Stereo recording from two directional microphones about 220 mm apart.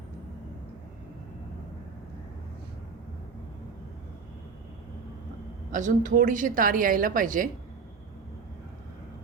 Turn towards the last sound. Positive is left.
turn(degrees=-35)  # may be behind; listen again after turning